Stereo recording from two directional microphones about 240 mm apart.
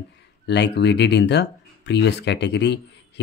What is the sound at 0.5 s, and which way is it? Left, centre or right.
Speech, left.